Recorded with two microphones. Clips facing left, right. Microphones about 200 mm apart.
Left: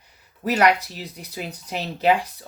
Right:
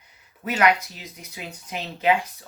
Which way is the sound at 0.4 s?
35° left (ahead or behind).